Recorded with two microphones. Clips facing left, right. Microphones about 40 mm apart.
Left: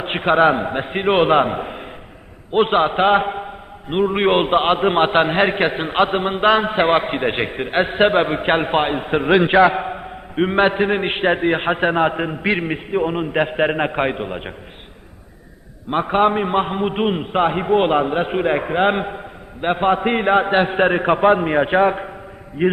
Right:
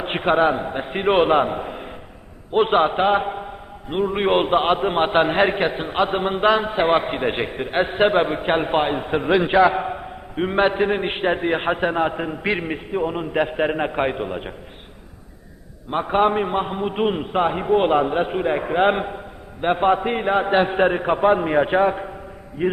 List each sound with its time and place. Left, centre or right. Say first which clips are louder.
0.0 s a sound: left 2 dB; centre
0.3 s a man's voice: left 7 dB; left
3.0 s a man's voice: left 3 dB; left
6.1 s a man's voice: left 2 dB; centre
16.0 s a man's voice: left 1 dB; centre
16.5 s a man's voice: left 4 dB; left
18.6 s a man's voice: left 1 dB; centre
20.1 s a man's voice: left 4 dB; left
20.4 s a man's voice: left 1 dB; centre
20.9 s a man's voice: left 3 dB; left
21.3 s a man's voice: left 2 dB; centre
22.6 s a man's voice: left 4 dB; left